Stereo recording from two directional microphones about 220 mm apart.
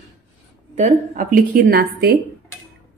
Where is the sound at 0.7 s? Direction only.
35° right (ahead or behind).